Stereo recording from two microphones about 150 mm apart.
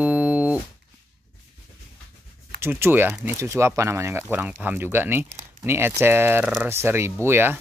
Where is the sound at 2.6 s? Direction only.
15° right (ahead or behind).